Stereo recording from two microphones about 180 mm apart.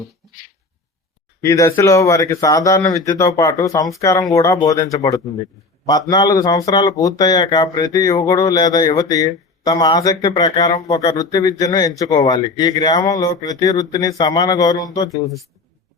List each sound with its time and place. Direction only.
1.4 s speech: 15° left (ahead or behind)